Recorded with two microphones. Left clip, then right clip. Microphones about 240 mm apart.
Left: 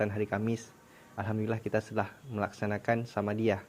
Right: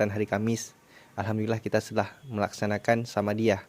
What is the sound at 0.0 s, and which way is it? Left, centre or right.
Speech, right.